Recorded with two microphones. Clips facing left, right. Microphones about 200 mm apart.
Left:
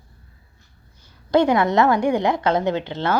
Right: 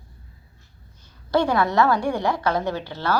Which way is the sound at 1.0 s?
20° left (ahead or behind).